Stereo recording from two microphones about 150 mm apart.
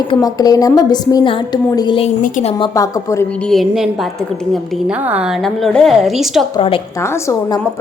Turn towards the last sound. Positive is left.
turn(degrees=20)  # may be behind; listen again after turning